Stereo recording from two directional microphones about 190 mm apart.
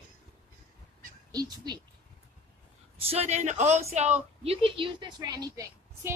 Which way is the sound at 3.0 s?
30° right (ahead or behind).